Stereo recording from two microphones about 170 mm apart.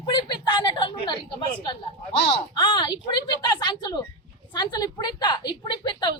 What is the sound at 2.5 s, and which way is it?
A woman's voice, 25° left (ahead or behind).